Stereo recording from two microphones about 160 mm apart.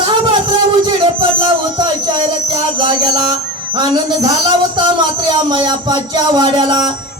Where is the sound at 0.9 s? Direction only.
30° right (ahead or behind).